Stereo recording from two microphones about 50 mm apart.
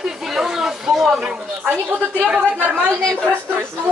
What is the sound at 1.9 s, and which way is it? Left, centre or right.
A woman's voice, right.